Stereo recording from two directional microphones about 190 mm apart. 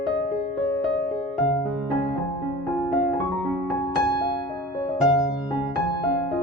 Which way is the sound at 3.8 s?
25° left (ahead or behind).